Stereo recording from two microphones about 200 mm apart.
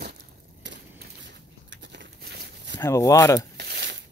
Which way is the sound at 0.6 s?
60° right (ahead or behind).